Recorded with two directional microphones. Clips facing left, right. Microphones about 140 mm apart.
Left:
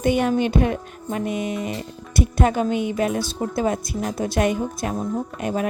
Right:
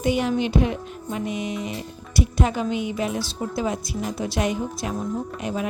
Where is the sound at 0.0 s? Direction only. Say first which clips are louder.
Left 3 dB; 50° left (ahead or behind).